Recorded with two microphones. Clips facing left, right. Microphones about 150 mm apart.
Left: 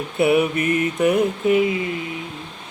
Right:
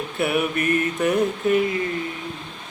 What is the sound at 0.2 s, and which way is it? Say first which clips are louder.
Mantra: left 5 dB; 20° left (ahead or behind).